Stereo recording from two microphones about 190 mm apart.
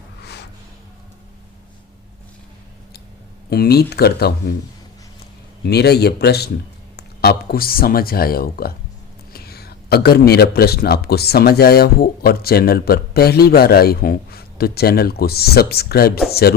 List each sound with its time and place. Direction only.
3.5 s speech: 55° left (ahead or behind)
5.6 s speech: 60° left (ahead or behind)